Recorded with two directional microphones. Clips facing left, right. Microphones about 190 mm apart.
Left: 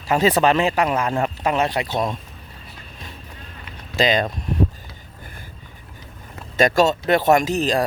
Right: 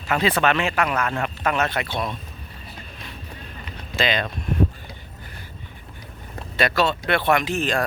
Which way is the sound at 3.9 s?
40° left (ahead or behind).